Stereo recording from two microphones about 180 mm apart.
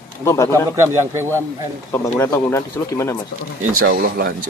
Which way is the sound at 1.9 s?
15° left (ahead or behind).